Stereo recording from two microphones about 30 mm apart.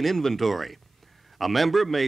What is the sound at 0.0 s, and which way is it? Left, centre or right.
Speech, centre.